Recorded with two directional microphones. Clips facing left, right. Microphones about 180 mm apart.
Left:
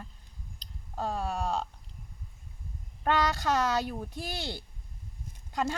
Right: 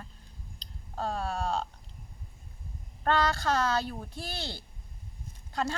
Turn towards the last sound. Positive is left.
turn(degrees=15)  # may be behind; listen again after turning